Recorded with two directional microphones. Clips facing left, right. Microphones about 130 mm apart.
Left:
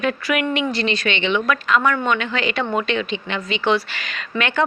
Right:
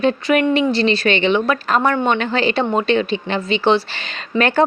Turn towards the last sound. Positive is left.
turn(degrees=-35)  # may be behind; listen again after turning